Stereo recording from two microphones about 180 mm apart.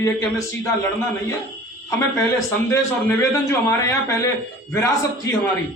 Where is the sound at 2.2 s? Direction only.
15° left (ahead or behind).